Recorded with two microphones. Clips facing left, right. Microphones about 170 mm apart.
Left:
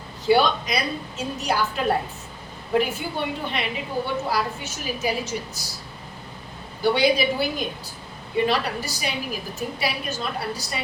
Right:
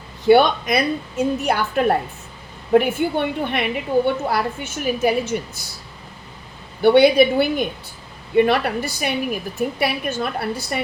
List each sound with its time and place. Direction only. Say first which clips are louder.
0.3 s a woman's voice: right 6 dB; 55° right (ahead or behind)
6.8 s a woman's voice: right 8 dB; 60° right (ahead or behind)